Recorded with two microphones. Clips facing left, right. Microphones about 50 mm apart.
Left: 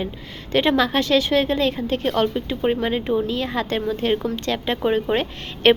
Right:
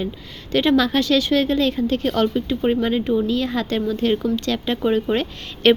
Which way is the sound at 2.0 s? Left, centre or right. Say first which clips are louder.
Left 1 dB; centre.